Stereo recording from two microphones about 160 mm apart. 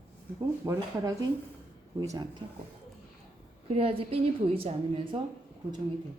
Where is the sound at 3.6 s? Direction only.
40° right (ahead or behind).